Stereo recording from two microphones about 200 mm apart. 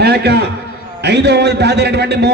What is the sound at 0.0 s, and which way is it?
A man's voice, 55° right (ahead or behind).